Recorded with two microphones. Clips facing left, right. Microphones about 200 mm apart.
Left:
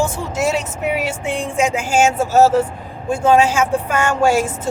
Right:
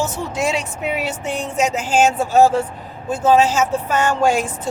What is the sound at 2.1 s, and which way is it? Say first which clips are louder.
Speech: left 1 dB; 45° left (ahead or behind).